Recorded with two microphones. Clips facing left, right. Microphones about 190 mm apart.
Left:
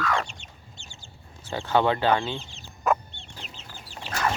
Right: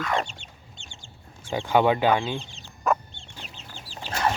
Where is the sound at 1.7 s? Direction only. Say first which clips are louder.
Right 2 dB; 10° right (ahead or behind).